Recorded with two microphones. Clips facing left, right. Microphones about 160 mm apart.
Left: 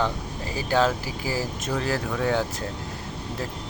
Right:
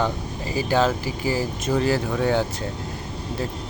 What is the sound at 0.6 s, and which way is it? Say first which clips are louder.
Speech: right 2 dB; centre (ahead or behind).